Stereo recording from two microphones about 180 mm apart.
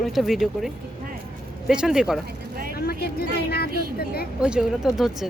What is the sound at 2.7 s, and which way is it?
Speech, 60° left (ahead or behind).